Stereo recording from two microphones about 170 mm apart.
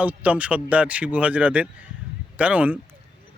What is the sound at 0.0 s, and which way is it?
Speech, 10° right (ahead or behind).